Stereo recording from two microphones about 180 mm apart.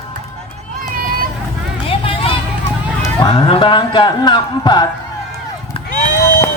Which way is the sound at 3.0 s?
20° left (ahead or behind).